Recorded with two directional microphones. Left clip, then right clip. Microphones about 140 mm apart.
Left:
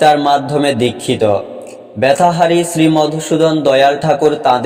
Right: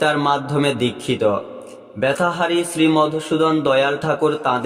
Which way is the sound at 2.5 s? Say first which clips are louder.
Left 5 dB; 25° left (ahead or behind).